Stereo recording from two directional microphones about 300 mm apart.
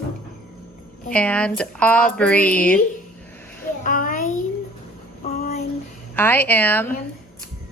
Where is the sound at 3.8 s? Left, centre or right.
Left.